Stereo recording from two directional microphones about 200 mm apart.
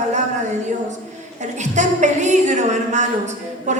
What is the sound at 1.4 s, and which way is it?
A woman's voice, 35° right (ahead or behind).